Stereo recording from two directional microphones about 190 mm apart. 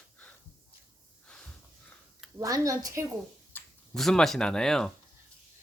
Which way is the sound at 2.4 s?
15° right (ahead or behind).